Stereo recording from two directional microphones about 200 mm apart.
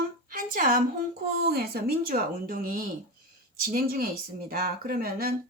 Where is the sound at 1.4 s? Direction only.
50° right (ahead or behind).